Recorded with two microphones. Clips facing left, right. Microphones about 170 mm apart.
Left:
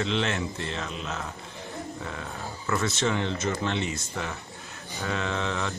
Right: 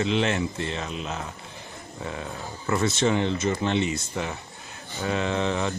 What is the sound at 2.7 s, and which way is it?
Speech, 20° right (ahead or behind).